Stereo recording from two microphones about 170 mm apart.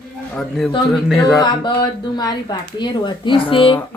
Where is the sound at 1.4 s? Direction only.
25° left (ahead or behind).